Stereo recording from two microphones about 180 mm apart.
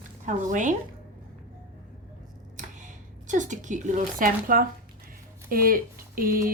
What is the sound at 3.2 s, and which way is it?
Speech, 45° right (ahead or behind).